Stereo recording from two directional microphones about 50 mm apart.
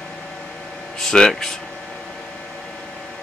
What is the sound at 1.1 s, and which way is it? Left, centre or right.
Speech, centre.